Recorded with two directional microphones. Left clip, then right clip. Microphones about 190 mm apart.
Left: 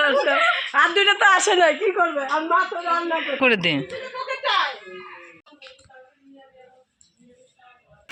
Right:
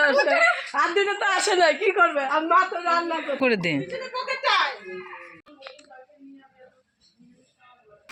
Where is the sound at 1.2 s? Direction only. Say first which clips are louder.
Left 4 dB; 35° left (ahead or behind).